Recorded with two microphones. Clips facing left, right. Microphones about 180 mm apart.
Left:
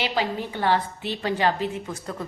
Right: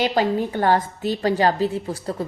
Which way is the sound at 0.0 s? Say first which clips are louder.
Right 6 dB; 45° right (ahead or behind).